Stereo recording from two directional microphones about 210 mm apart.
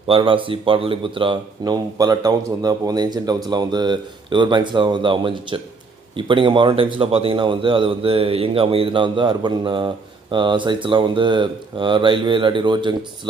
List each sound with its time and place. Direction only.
0.1 s speech: 25° right (ahead or behind)